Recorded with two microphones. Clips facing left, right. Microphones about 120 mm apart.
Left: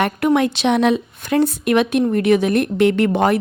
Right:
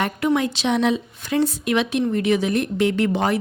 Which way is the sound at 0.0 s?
60° left (ahead or behind).